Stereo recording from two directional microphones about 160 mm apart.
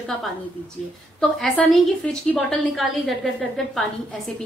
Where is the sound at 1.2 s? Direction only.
Centre (ahead or behind).